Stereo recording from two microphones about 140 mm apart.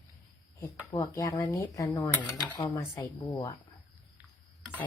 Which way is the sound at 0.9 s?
20° left (ahead or behind).